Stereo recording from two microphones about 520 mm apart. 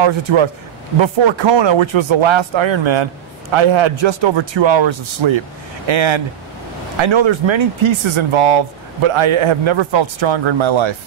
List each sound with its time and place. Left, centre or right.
0.0 s speech: right